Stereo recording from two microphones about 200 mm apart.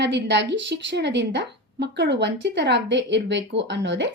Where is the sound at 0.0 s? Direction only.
60° right (ahead or behind).